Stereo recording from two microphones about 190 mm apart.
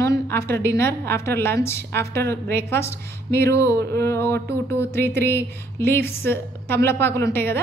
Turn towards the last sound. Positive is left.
turn(degrees=10)  # may be behind; listen again after turning